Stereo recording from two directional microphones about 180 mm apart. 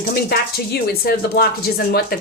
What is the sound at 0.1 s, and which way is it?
Speech, 60° left (ahead or behind).